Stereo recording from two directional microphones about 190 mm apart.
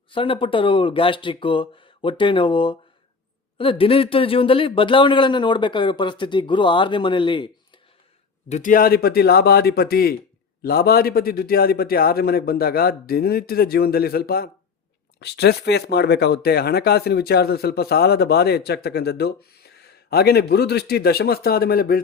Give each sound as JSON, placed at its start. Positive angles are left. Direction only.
{"t": 0.1, "sound": "speech", "side_deg": 25}
{"t": 8.4, "sound": "a man's voice", "side_deg": 40}